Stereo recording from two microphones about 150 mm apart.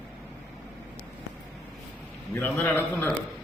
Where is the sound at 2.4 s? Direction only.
10° left (ahead or behind).